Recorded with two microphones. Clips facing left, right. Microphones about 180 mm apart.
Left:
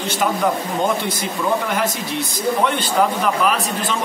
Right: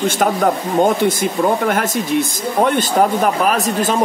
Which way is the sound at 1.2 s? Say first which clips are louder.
Right 5 dB; 50° right (ahead or behind).